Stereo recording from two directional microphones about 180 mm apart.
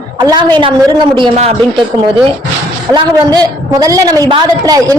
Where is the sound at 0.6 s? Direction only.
25° right (ahead or behind).